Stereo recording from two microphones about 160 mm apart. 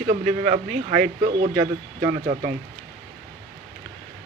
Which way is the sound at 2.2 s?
60° right (ahead or behind).